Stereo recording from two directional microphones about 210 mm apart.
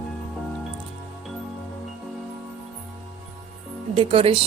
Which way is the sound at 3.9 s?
25° right (ahead or behind).